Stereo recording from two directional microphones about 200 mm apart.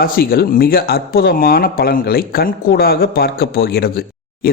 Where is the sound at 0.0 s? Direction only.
50° left (ahead or behind).